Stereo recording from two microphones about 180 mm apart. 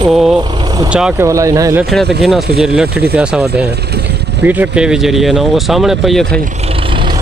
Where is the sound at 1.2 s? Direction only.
15° right (ahead or behind).